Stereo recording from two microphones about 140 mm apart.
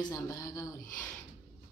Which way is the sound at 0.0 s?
25° left (ahead or behind).